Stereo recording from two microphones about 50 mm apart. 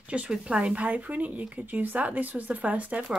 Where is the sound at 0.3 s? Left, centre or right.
Right.